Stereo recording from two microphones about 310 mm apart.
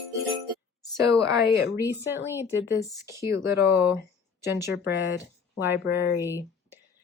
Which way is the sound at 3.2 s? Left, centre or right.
Centre.